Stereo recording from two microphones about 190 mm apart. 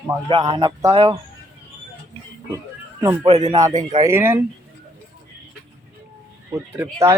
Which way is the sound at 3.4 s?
20° right (ahead or behind).